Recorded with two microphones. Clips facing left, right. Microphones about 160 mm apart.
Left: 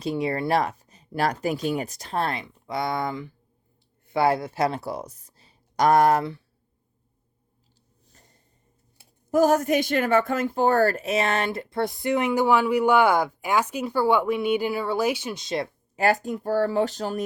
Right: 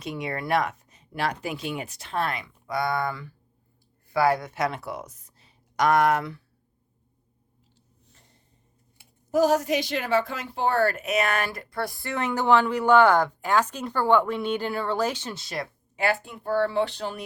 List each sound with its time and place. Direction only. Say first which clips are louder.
0.0 s speech: left 6 dB; 35° left (ahead or behind)
9.3 s a woman's voice: left 2 dB; 50° left (ahead or behind); by 15.7 s 25° left (ahead or behind)
16.0 s speech: left 4 dB; 40° left (ahead or behind)